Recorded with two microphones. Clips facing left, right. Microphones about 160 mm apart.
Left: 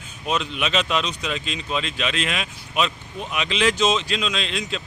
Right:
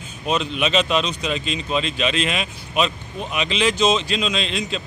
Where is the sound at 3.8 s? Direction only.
Centre (ahead or behind).